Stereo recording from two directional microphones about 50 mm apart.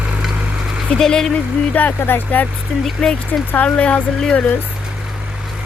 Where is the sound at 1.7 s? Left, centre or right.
Left.